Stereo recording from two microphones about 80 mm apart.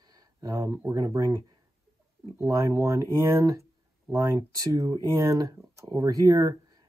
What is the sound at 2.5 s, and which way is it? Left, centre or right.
Speech, right.